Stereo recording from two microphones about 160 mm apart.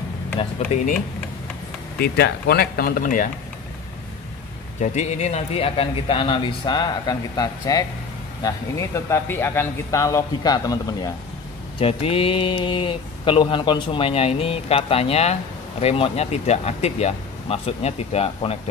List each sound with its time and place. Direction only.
0.6 s speech: 55° left (ahead or behind)
2.0 s speech: 85° left; by 3.3 s 60° left (ahead or behind)
4.7 s speech: 50° left (ahead or behind); by 11.1 s 20° left (ahead or behind)
11.8 s speech: 35° left (ahead or behind)